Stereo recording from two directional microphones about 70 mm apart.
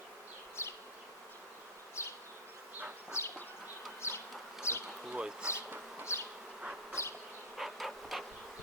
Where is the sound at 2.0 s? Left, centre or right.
Left.